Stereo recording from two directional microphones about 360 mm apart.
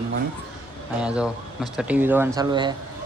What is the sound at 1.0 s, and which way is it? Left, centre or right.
Speech, centre.